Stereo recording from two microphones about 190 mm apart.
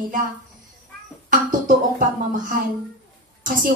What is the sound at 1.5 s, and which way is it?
Speech, 45° right (ahead or behind).